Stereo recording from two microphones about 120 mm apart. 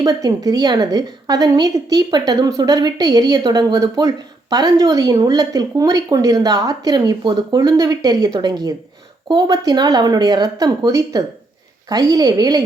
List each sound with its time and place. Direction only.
0.0 s a woman's voice: 30° right (ahead or behind)